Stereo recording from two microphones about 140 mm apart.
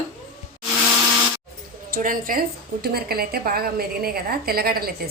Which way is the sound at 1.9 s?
85° right.